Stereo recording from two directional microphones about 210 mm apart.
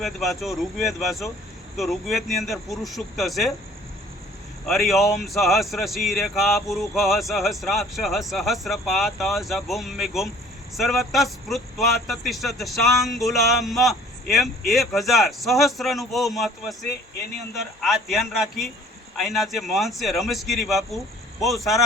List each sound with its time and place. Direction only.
0.0 s speech: centre (ahead or behind)
4.6 s speech: centre (ahead or behind)